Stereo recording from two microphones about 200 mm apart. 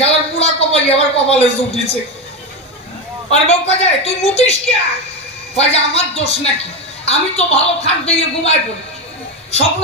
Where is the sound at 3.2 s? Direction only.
30° left (ahead or behind).